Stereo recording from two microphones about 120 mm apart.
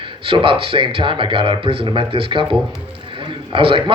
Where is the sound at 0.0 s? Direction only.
45° right (ahead or behind).